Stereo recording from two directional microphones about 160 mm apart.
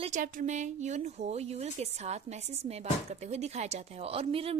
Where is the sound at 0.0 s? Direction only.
50° right (ahead or behind).